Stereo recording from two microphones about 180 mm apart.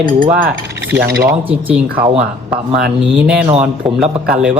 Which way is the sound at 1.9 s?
30° right (ahead or behind).